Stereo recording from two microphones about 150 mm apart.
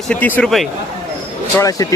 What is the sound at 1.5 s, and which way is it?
Speech, 20° left (ahead or behind).